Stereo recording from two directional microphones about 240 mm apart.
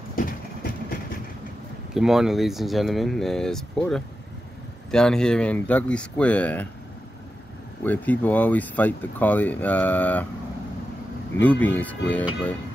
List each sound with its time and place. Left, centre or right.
0.1 s vehicle: left
2.0 s speech: centre
7.8 s speech: centre
11.3 s speech: centre